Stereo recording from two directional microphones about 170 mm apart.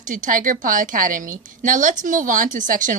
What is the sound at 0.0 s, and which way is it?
A woman's voice, 50° right (ahead or behind).